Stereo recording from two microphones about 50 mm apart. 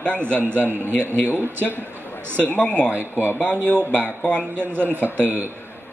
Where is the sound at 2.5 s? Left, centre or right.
Left.